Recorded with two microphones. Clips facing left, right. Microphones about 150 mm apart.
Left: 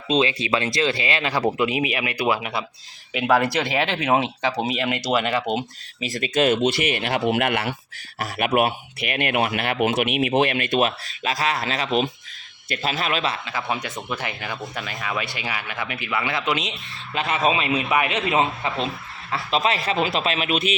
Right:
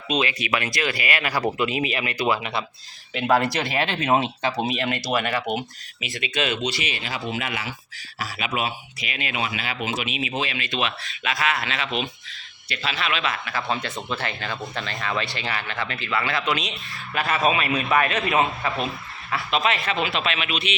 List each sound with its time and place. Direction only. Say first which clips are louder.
0.1 s speech: left 3 dB; 25° left (ahead or behind)
6.0 s speech: left 6 dB; 45° left (ahead or behind)
13.3 s speech: even; 20° left (ahead or behind)
14.6 s speech: right 1 dB; centre (ahead or behind); by 20.7 s 45° left (ahead or behind)